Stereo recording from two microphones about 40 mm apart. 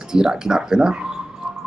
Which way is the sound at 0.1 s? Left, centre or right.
Centre.